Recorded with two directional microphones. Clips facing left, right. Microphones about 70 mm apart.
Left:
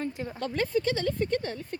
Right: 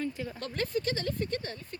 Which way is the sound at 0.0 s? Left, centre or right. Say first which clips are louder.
Left 1 dB; left.